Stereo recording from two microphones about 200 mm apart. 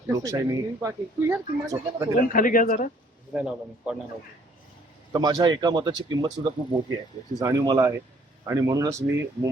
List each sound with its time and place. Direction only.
0.1 s speech: 15° right (ahead or behind)
2.3 s speech: 45° left (ahead or behind)
3.3 s speech: 5° right (ahead or behind)
5.1 s speech: 20° right (ahead or behind)